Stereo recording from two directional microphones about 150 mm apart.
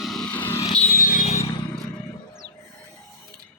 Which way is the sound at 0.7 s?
60° left (ahead or behind).